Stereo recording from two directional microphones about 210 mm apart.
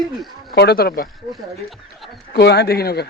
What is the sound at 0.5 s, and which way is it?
Speech, 50° left (ahead or behind).